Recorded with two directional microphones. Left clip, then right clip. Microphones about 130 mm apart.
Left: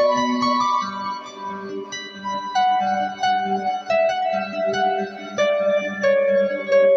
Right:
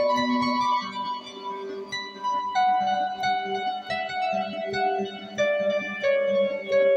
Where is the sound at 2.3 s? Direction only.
40° left (ahead or behind).